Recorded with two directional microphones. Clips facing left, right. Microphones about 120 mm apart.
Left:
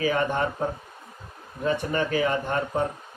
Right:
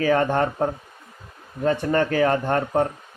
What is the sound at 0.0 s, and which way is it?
Speech, 50° right (ahead or behind).